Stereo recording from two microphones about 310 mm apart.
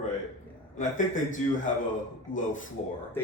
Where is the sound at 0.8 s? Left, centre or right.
Left.